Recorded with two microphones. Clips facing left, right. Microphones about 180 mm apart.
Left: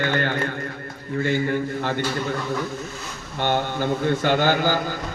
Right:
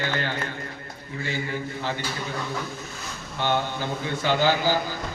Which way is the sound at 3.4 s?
55° left (ahead or behind).